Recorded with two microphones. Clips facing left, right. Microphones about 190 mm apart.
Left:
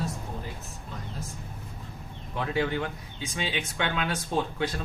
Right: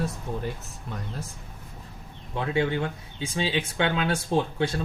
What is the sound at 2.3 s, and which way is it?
Speech, 25° right (ahead or behind).